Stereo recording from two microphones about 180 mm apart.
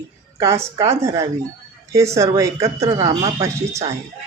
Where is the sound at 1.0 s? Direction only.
20° right (ahead or behind).